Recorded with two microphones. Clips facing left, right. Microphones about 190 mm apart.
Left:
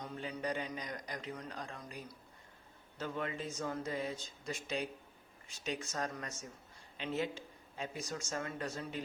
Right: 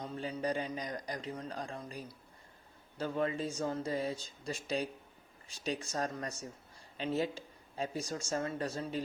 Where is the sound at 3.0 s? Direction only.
35° right (ahead or behind).